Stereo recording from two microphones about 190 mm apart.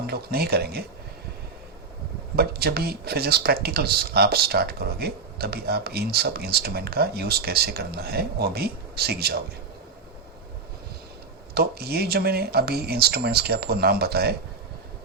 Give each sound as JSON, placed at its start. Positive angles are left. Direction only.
{"t": 0.1, "sound": "speech", "side_deg": -55}
{"t": 2.3, "sound": "speech", "side_deg": -55}
{"t": 11.5, "sound": "speech", "side_deg": -55}